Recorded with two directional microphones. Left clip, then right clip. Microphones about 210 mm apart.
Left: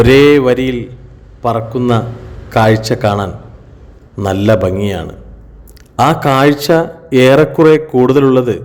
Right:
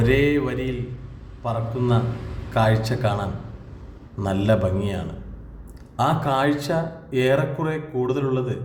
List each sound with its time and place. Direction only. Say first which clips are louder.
0.0 s a man's voice: left 14 dB; 50° left (ahead or behind)